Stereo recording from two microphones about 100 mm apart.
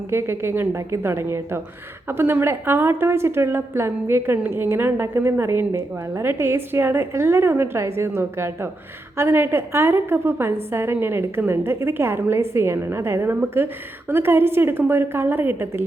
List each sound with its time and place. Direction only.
0.1 s a woman's voice: 25° right (ahead or behind)